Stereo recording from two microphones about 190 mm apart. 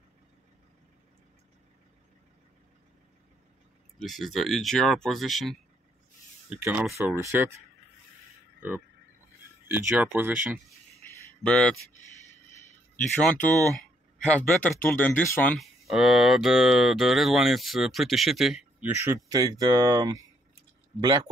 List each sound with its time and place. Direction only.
4.0 s speech: centre (ahead or behind)
9.7 s speech: 5° right (ahead or behind)
11.4 s speech: 5° left (ahead or behind)
12.9 s speech: 5° left (ahead or behind)
15.6 s speech: centre (ahead or behind); by 21.3 s 25° right (ahead or behind)